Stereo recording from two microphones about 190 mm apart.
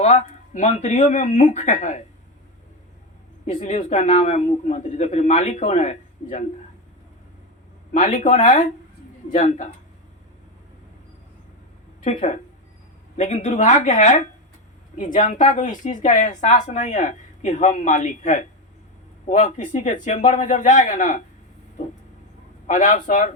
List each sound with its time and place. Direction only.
0.0 s a woman's voice: 40° left (ahead or behind)
3.4 s a woman's voice: 35° left (ahead or behind)
8.0 s speech: 40° left (ahead or behind)
12.0 s a woman's voice: 35° left (ahead or behind)
22.6 s a woman's voice: 40° left (ahead or behind)